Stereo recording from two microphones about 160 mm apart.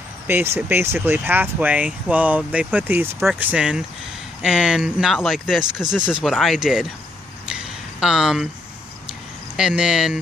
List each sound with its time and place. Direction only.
0.3 s speech: 15° right (ahead or behind)
3.2 s speech: centre (ahead or behind)
7.4 s a sound: 5° right (ahead or behind)
9.6 s speech: 5° right (ahead or behind)